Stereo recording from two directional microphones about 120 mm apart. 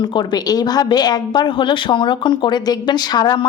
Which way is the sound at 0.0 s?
35° left (ahead or behind).